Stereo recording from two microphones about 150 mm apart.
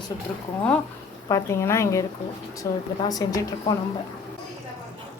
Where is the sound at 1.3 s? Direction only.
20° left (ahead or behind).